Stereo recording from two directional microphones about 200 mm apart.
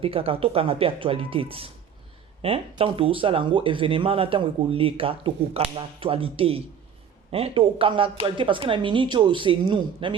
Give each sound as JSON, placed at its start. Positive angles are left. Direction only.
{"t": 0.0, "sound": "speech", "side_deg": -30}